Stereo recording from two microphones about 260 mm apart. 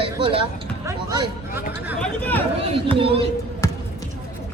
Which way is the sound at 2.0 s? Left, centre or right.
Centre.